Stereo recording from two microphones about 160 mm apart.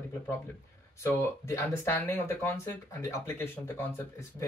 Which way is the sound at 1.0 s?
15° left (ahead or behind).